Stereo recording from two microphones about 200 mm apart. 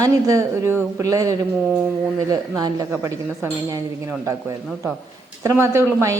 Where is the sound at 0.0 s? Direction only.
15° right (ahead or behind).